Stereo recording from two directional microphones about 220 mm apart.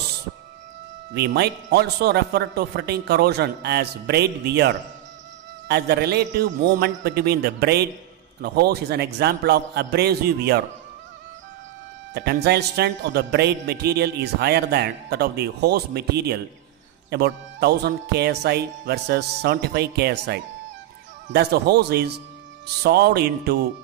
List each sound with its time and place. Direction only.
1.1 s a man's voice: 45° right (ahead or behind)
12.1 s a man's voice: 50° right (ahead or behind)